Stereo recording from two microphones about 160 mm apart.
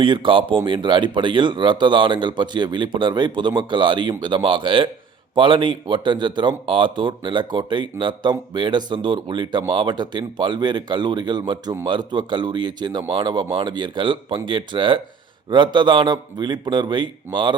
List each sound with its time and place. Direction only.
0.0 s speech: 30° right (ahead or behind)